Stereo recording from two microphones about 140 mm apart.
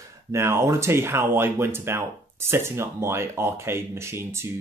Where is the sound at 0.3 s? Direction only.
20° right (ahead or behind).